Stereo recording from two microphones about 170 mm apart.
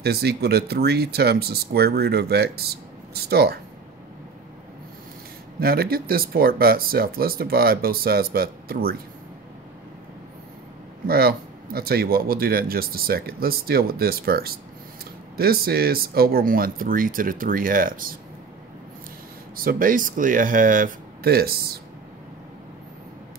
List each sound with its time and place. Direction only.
0.0 s speech: 70° right (ahead or behind)
5.6 s speech: 60° right (ahead or behind)
11.1 s speech: 65° right (ahead or behind)
19.5 s speech: 55° right (ahead or behind)